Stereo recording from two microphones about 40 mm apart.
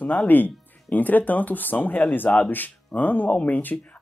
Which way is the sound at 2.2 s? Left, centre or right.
Left.